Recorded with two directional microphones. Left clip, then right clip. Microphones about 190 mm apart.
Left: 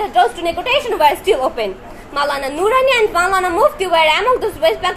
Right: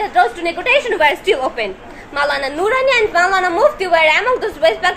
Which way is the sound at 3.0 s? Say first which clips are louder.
Right 1 dB; 40° left (ahead or behind).